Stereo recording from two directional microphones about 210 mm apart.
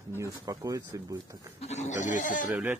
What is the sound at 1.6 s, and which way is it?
Speech, 30° left (ahead or behind).